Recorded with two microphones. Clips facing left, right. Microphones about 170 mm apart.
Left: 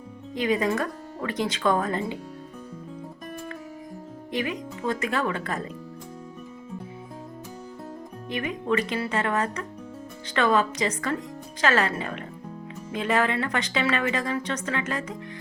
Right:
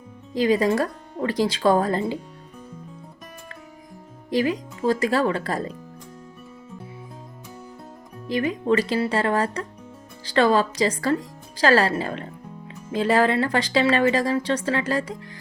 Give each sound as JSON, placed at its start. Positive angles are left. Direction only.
{"t": 0.3, "sound": "speech", "side_deg": -35}
{"t": 4.3, "sound": "speech", "side_deg": -35}
{"t": 8.3, "sound": "speech", "side_deg": -35}